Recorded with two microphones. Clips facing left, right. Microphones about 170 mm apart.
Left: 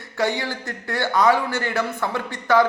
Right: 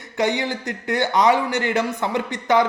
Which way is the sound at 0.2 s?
20° right (ahead or behind).